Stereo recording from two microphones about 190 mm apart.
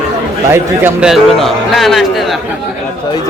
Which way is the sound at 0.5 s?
10° right (ahead or behind).